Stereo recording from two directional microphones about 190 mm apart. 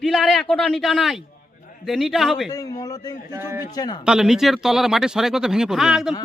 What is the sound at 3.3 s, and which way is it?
Speech, 10° right (ahead or behind).